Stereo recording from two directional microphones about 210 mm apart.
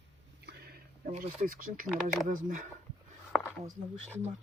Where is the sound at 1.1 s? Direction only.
40° right (ahead or behind).